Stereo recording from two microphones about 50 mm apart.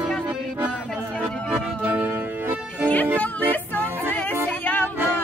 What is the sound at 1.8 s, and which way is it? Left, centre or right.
Music, right.